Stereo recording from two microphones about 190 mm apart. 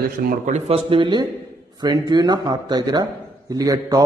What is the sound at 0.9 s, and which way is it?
Speech, 25° right (ahead or behind).